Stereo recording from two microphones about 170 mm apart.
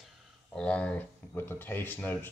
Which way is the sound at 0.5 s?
5° left (ahead or behind).